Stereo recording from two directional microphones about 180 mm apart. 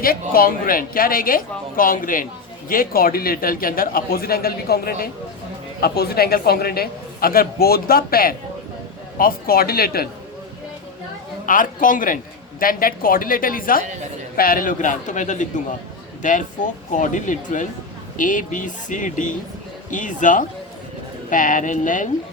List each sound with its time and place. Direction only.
0.0 s a man's voice: 55° left (ahead or behind)
11.4 s a man's voice: 50° left (ahead or behind)